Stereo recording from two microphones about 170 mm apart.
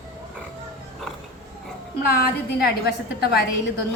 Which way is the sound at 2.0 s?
65° left (ahead or behind).